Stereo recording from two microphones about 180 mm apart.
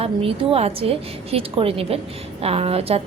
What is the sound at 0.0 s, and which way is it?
A woman's voice, 30° right (ahead or behind).